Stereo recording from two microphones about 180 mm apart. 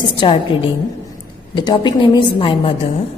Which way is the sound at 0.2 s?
30° left (ahead or behind).